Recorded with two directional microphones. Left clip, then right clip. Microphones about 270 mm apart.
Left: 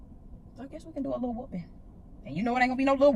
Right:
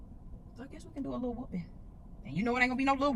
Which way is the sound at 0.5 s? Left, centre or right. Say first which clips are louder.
Left 7 dB; centre.